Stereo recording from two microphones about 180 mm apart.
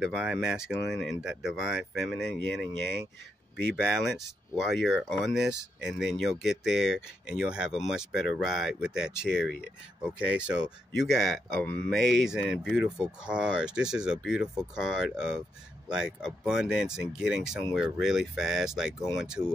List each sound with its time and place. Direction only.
0.0 s speech: 5° right (ahead or behind)
4.6 s speech: centre (ahead or behind)